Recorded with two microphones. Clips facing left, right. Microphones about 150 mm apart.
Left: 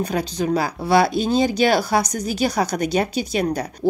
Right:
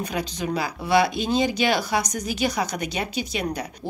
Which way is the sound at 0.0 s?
35° left (ahead or behind).